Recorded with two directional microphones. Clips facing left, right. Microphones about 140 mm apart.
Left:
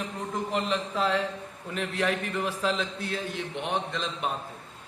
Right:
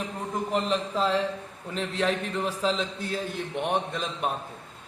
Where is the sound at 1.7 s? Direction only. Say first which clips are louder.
Right 1 dB; 30° right (ahead or behind).